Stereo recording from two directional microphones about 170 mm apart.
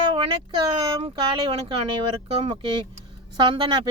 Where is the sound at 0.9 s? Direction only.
30° right (ahead or behind).